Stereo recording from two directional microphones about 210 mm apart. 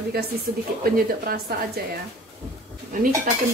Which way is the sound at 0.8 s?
45° right (ahead or behind).